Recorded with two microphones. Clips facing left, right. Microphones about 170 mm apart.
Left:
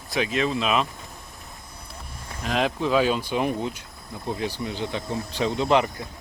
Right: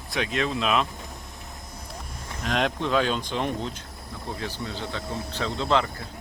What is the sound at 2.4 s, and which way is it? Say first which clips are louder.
Speech: left 2 dB; 5° left (ahead or behind).